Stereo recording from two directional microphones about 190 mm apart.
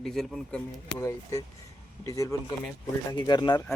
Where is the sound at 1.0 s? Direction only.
15° left (ahead or behind).